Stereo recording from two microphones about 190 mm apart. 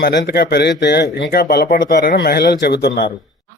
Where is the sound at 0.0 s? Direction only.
60° left (ahead or behind).